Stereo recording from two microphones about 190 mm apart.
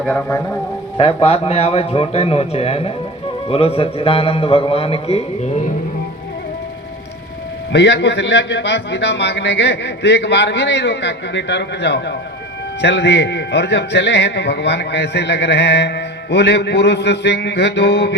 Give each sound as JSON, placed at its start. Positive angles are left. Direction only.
{"t": 0.0, "sound": "a man's voice", "side_deg": 10}
{"t": 0.9, "sound": "a man's voice", "side_deg": 30}
{"t": 7.7, "sound": "a man's voice", "side_deg": 65}